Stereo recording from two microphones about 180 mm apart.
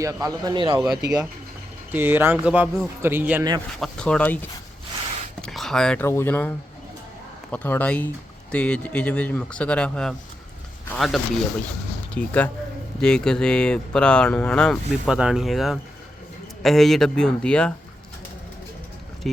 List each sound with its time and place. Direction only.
0.0 s speech: 20° right (ahead or behind)
1.9 s a man's voice: 10° right (ahead or behind)
3.8 s speech: 5° left (ahead or behind)
5.4 s a sound: centre (ahead or behind)
6.1 s speech: 15° left (ahead or behind)
7.5 s speech: 10° left (ahead or behind)
19.2 s speech: centre (ahead or behind)